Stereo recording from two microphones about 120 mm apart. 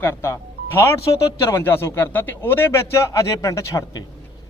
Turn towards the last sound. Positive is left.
turn(degrees=30)  # may be behind; listen again after turning